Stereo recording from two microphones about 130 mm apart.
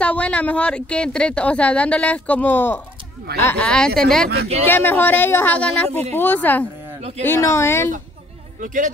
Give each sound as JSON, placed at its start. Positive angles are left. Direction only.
{"t": 0.0, "sound": "speech", "side_deg": 10}
{"t": 4.6, "sound": "speech", "side_deg": 15}
{"t": 7.0, "sound": "speech", "side_deg": -55}
{"t": 7.2, "sound": "speech", "side_deg": 20}
{"t": 8.5, "sound": "a man's voice", "side_deg": -80}